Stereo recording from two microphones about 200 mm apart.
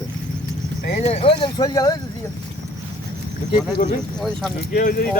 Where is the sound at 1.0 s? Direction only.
30° left (ahead or behind).